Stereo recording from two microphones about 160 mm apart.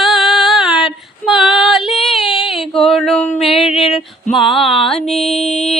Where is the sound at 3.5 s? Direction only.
35° left (ahead or behind).